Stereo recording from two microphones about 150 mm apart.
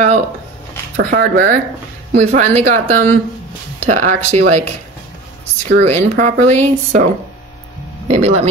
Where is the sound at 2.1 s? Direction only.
45° right (ahead or behind).